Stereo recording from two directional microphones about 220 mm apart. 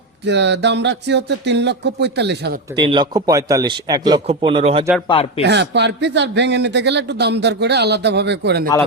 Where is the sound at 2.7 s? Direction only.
20° right (ahead or behind).